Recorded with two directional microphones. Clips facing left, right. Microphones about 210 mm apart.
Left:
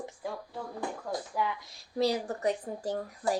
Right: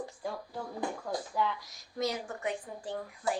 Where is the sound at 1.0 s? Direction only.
5° left (ahead or behind).